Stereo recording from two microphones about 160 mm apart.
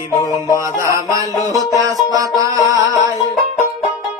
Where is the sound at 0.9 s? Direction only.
20° right (ahead or behind).